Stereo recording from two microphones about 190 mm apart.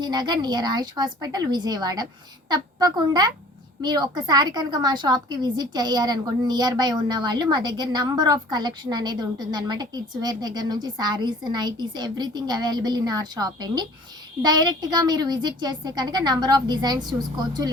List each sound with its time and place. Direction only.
0.0 s a woman's voice: 20° right (ahead or behind)